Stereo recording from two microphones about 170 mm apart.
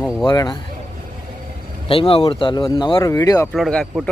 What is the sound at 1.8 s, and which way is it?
Speech, 35° left (ahead or behind).